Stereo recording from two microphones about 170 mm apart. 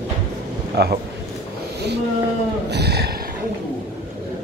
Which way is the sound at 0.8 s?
70° right (ahead or behind).